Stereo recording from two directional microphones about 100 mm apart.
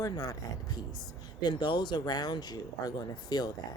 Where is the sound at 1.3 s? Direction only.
45° left (ahead or behind).